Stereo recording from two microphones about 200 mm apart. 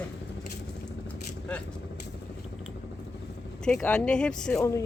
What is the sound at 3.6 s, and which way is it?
Speech, 5° left (ahead or behind).